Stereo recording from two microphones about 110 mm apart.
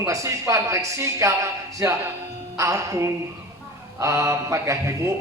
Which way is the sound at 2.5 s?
30° right (ahead or behind).